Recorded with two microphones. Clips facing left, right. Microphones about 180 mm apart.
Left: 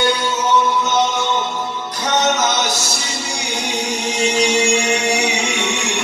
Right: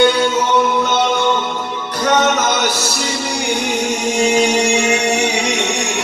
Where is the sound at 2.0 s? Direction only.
55° right (ahead or behind).